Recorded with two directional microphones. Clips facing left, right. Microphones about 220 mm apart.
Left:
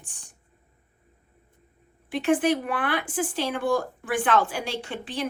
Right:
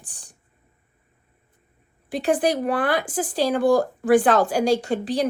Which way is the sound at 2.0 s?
40° right (ahead or behind).